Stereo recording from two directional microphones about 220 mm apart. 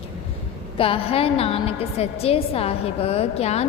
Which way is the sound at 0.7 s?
25° left (ahead or behind).